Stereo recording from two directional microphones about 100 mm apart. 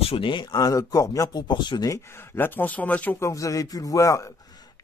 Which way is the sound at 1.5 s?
50° left (ahead or behind).